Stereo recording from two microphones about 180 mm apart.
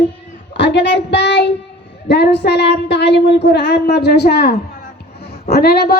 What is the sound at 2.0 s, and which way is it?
A woman's voice, 70° left (ahead or behind).